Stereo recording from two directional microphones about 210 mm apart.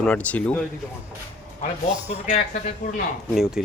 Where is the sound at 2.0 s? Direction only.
30° left (ahead or behind).